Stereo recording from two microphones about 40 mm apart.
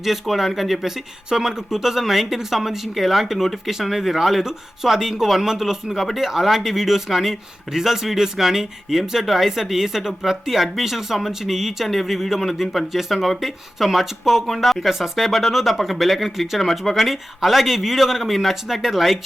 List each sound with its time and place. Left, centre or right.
0.0 s speech: centre
15.2 s speech: centre
17.4 s speech: centre